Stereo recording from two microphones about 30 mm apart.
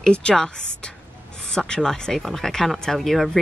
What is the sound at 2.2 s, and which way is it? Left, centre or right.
Speech, centre.